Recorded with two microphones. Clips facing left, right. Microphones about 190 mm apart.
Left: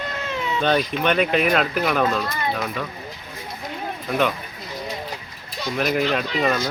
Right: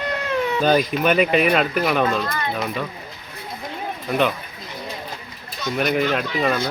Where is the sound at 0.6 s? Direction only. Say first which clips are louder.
Right 1 dB; 5° right (ahead or behind).